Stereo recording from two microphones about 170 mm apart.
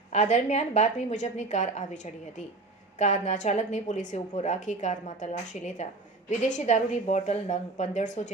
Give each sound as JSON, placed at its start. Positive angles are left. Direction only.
{"t": 0.1, "sound": "a woman's voice", "side_deg": 45}